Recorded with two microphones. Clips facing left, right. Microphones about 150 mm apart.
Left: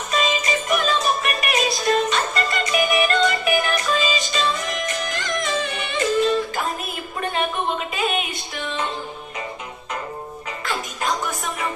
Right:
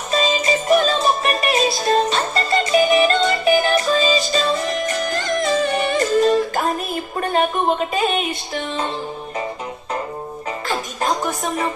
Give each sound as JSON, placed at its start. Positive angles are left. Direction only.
{"t": 0.1, "sound": "music", "side_deg": -30}
{"t": 7.2, "sound": "speech", "side_deg": -40}
{"t": 11.0, "sound": "music", "side_deg": -35}